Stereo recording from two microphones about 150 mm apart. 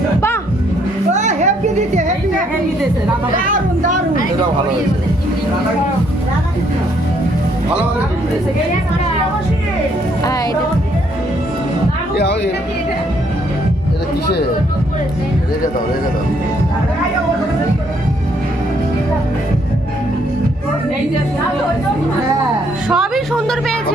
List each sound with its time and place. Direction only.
1.1 s music: 55° right (ahead or behind)
3.3 s a sound: 60° right (ahead or behind)
10.2 s speech: 25° left (ahead or behind)
22.9 s speech: centre (ahead or behind)